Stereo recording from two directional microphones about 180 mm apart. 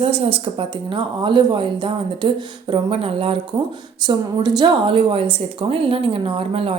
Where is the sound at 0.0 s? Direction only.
35° right (ahead or behind).